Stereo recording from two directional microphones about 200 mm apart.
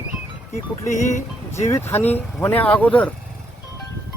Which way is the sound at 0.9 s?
35° left (ahead or behind).